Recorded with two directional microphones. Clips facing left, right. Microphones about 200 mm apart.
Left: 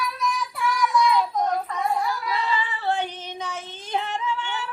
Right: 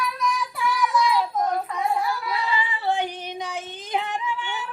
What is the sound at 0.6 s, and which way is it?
Child singing, centre (ahead or behind).